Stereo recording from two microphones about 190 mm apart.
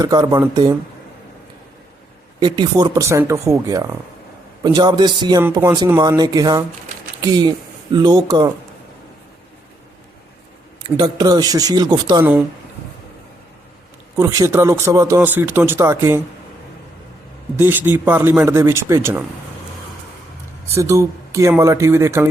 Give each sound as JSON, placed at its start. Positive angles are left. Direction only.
{"t": 0.0, "sound": "speech", "side_deg": -20}
{"t": 2.4, "sound": "speech", "side_deg": -20}
{"t": 10.8, "sound": "speech", "side_deg": -20}
{"t": 12.2, "sound": "speech", "side_deg": -10}
{"t": 14.2, "sound": "speech", "side_deg": -15}
{"t": 17.6, "sound": "speech", "side_deg": -10}
{"t": 20.7, "sound": "speech", "side_deg": -15}